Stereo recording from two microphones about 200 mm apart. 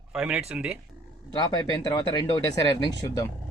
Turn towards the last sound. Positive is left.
turn(degrees=20)  # may be behind; listen again after turning